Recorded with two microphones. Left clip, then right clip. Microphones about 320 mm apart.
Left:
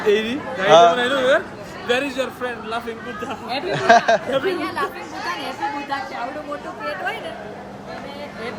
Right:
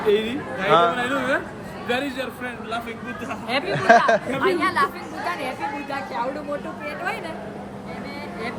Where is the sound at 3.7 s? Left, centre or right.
Centre.